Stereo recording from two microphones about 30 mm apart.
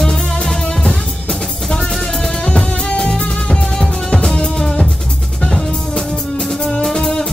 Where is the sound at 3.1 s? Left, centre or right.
Left.